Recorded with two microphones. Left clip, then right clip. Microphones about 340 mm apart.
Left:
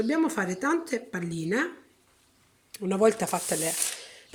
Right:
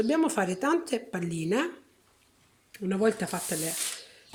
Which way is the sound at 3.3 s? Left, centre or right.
Left.